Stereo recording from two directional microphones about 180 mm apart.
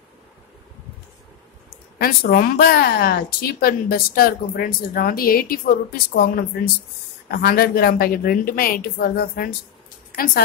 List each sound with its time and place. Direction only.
2.0 s a woman's voice: 55° left (ahead or behind)